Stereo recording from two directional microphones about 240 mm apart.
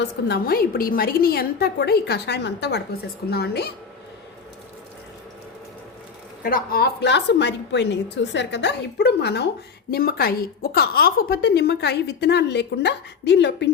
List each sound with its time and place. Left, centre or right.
0.3 s a woman's voice: left
6.4 s a woman's voice: left